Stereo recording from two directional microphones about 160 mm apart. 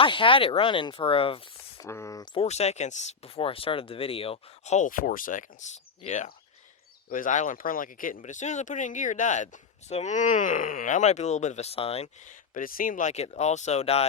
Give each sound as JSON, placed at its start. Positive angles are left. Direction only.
{"t": 0.0, "sound": "speech", "side_deg": 30}
{"t": 1.8, "sound": "speech", "side_deg": 20}
{"t": 7.1, "sound": "speech", "side_deg": 55}